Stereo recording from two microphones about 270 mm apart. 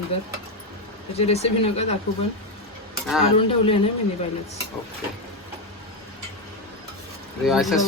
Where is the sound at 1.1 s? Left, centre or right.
Left.